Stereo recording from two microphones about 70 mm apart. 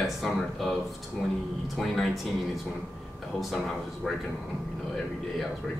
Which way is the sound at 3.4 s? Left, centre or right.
Centre.